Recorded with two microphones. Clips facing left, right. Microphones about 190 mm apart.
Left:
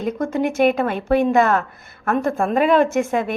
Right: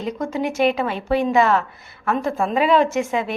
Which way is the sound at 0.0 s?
55° left (ahead or behind).